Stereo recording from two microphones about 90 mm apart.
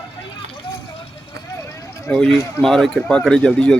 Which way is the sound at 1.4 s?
40° left (ahead or behind).